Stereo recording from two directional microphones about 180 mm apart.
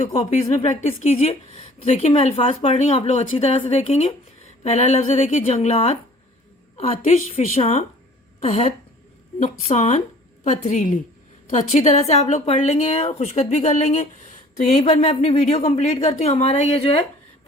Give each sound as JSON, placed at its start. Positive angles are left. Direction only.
{"t": 0.5, "sound": "a woman's voice", "side_deg": 40}